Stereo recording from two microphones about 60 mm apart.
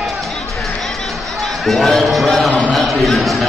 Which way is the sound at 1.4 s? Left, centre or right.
Centre.